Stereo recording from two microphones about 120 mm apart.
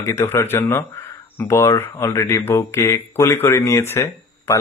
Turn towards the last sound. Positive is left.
turn(degrees=20)  # may be behind; listen again after turning